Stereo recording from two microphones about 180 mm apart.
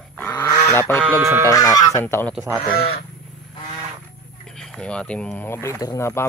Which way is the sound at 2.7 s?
60° left (ahead or behind).